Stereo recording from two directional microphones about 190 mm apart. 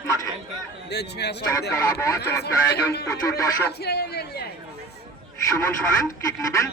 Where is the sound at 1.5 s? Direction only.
15° left (ahead or behind).